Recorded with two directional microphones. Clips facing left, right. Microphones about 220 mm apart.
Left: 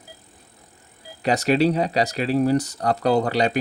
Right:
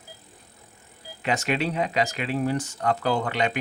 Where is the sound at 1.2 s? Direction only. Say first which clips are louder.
Left 7 dB; 35° left (ahead or behind).